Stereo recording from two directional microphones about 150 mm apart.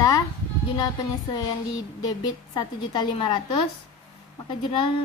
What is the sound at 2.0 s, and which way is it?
A woman's voice, 25° left (ahead or behind).